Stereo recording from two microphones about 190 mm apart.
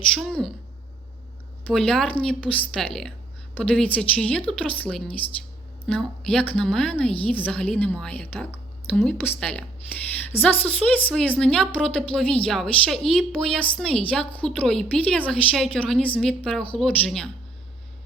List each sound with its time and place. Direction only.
0.1 s a woman's voice: centre (ahead or behind)
1.6 s a woman's voice: 5° left (ahead or behind)